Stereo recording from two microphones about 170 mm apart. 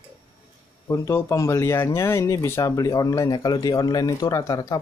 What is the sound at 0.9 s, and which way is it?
Speech, 15° left (ahead or behind).